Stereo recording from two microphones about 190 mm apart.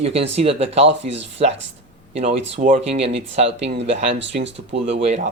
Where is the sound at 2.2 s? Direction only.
35° right (ahead or behind).